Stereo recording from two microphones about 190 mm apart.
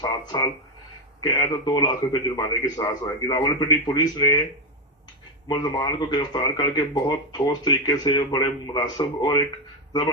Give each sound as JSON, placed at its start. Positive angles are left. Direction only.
{"t": 0.0, "sound": "speech", "side_deg": 20}
{"t": 5.5, "sound": "speech", "side_deg": 20}